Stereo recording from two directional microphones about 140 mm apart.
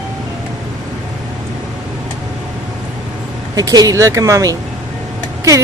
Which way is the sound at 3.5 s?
25° right (ahead or behind).